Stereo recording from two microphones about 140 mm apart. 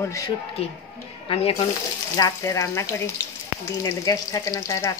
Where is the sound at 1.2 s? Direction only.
40° left (ahead or behind).